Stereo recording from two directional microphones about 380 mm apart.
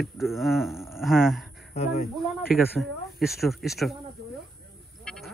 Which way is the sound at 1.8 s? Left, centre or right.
Centre.